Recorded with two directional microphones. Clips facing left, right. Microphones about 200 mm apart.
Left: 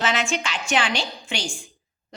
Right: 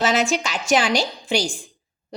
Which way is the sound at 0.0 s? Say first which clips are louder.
Right 4 dB; 40° right (ahead or behind).